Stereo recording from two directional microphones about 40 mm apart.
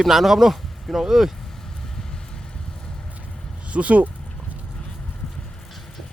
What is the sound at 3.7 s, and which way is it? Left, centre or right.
Speech, right.